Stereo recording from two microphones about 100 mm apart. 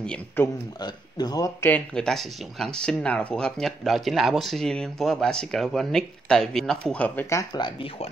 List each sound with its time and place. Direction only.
0.4 s speech: 20° left (ahead or behind)
0.7 s speech: 45° left (ahead or behind)
2.0 s speech: 5° left (ahead or behind)